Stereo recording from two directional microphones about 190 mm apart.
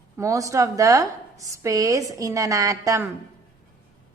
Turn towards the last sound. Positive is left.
turn(degrees=-15)  # may be behind; listen again after turning